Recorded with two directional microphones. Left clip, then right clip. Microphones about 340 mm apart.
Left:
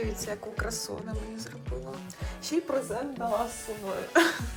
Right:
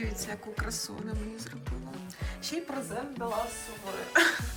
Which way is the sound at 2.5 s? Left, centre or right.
Left.